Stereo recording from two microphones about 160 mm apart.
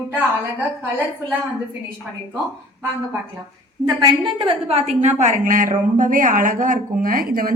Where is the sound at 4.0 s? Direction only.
30° right (ahead or behind).